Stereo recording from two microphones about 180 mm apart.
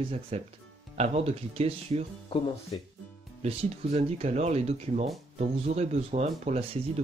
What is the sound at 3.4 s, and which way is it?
Speech, 35° right (ahead or behind).